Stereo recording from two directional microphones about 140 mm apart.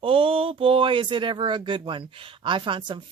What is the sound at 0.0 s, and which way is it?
Speech, 40° right (ahead or behind).